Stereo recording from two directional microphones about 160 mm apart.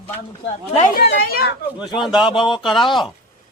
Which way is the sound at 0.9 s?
80° left.